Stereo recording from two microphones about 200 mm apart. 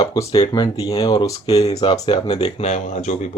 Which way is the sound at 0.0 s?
20° left (ahead or behind).